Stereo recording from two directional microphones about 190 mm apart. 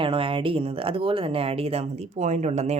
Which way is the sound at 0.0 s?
25° right (ahead or behind).